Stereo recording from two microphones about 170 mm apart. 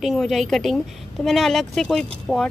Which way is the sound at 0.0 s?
Centre (ahead or behind).